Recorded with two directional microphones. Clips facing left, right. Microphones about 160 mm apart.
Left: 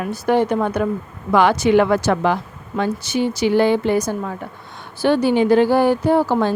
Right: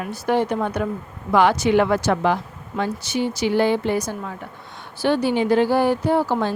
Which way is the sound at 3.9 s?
50° left (ahead or behind).